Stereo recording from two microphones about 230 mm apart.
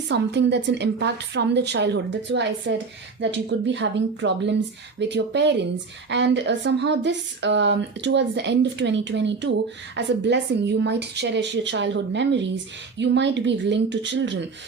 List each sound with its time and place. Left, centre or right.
0.1 s a woman's voice: right